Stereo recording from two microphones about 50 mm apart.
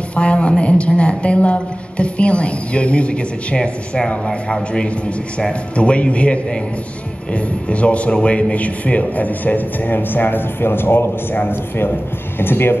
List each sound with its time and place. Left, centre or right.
0.1 s a woman's voice: left
5.8 s a woman's voice: left